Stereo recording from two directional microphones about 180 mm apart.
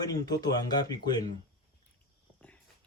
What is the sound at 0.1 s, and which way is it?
Speech, 20° left (ahead or behind).